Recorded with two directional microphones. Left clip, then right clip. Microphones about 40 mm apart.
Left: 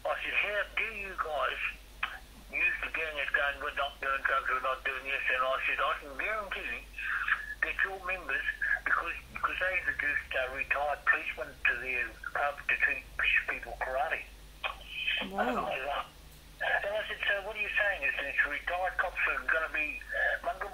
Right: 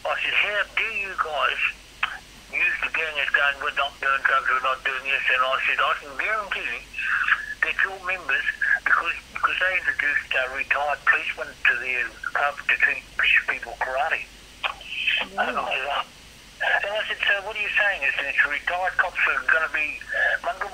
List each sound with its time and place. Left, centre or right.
0.0 s radio: right
2.5 s speech: right